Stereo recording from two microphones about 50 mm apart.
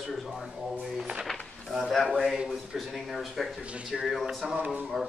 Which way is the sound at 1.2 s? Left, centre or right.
Centre.